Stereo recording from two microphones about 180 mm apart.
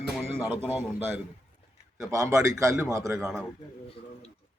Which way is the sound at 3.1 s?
Centre (ahead or behind).